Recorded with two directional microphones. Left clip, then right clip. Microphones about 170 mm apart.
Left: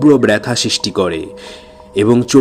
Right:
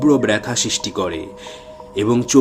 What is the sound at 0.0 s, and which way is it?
A man's voice, 30° left (ahead or behind).